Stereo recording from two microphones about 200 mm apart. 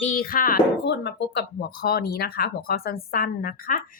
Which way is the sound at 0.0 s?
45° left (ahead or behind).